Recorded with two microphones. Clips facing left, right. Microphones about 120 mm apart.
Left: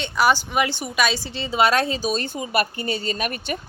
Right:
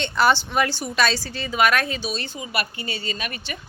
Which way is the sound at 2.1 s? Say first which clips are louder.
Left 5 dB; 45° left (ahead or behind).